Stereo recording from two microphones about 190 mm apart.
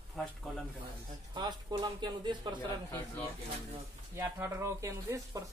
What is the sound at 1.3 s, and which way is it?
Speech, 20° right (ahead or behind).